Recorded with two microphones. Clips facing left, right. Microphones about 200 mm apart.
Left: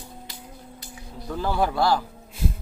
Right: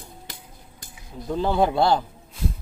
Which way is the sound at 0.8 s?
50° right (ahead or behind).